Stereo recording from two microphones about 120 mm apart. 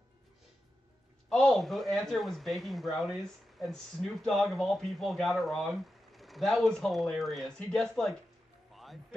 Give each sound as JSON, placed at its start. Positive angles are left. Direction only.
{"t": 1.3, "sound": "speech", "side_deg": 5}
{"t": 8.7, "sound": "music", "side_deg": 0}